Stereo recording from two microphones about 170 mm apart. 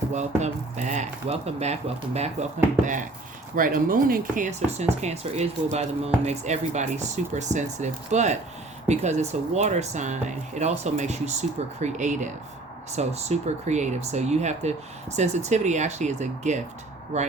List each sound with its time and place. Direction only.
0.1 s speech: 45° right (ahead or behind)